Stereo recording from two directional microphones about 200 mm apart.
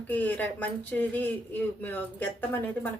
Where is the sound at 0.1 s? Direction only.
10° left (ahead or behind).